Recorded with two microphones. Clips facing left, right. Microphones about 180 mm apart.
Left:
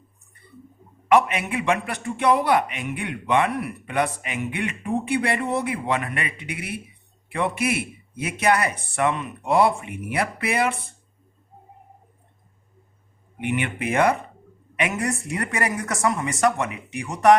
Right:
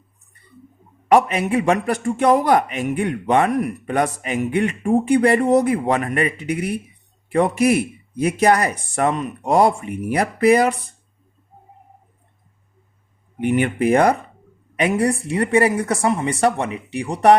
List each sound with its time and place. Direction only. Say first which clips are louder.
1.0 s a man's voice: right 3 dB; 35° right (ahead or behind)
13.4 s a man's voice: right 8 dB; 40° right (ahead or behind)